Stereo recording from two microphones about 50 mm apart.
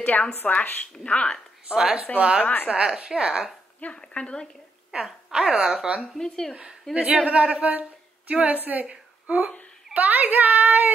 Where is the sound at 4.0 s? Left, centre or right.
Centre.